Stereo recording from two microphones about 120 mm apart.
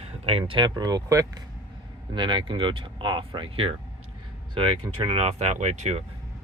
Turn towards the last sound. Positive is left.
turn(degrees=-70)  # may be behind; listen again after turning